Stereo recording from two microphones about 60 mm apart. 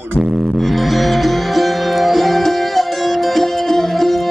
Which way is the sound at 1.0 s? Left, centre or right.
Centre.